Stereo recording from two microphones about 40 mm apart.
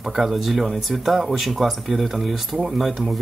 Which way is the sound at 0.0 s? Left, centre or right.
Centre.